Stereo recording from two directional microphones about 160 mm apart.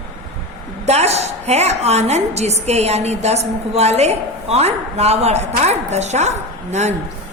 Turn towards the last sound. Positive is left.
turn(degrees=-45)  # may be behind; listen again after turning